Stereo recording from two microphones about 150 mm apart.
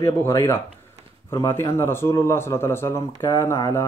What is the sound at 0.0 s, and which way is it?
Speech, 20° left (ahead or behind).